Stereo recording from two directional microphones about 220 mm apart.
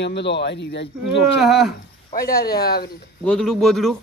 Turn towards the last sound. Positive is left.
turn(degrees=0)  # may be behind; listen again after turning